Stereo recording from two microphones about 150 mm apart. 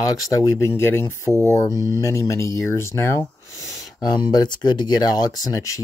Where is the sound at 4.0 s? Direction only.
25° left (ahead or behind).